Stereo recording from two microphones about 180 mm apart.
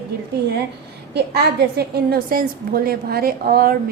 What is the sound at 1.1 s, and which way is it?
A woman's voice, 65° right (ahead or behind).